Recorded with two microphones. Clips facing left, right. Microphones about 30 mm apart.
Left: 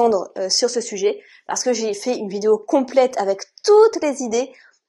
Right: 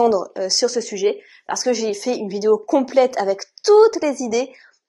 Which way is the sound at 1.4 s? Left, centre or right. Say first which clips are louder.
Even; centre.